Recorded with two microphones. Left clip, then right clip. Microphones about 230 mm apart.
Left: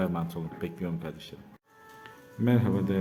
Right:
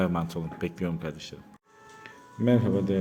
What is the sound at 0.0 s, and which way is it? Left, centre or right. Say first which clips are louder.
A man's voice: right 3 dB; right.